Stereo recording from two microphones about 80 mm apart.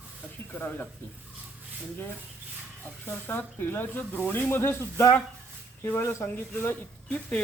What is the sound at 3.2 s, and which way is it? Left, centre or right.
Speech, left.